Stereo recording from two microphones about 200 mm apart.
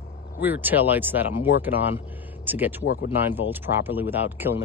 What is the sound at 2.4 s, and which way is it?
Speech, 10° right (ahead or behind).